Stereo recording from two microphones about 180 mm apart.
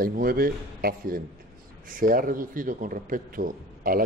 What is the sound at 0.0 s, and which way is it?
Speech, 55° right (ahead or behind).